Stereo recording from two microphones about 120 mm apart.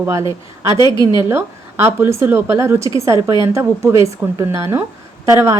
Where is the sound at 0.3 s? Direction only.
40° left (ahead or behind).